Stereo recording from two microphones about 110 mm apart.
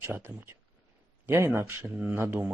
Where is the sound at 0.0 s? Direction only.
20° right (ahead or behind).